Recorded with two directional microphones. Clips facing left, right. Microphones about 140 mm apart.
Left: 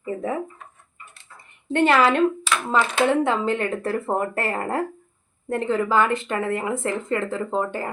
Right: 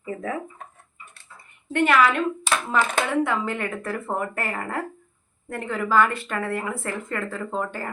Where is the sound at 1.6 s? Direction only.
30° left (ahead or behind).